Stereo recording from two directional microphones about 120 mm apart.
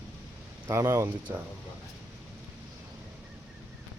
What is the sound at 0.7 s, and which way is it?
Speech, 25° right (ahead or behind).